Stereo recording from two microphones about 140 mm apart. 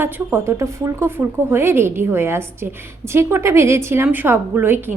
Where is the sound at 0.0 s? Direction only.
15° right (ahead or behind).